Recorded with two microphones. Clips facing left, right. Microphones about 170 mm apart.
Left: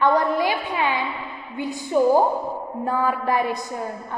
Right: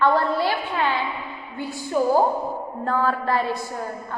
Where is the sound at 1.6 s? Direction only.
20° left (ahead or behind).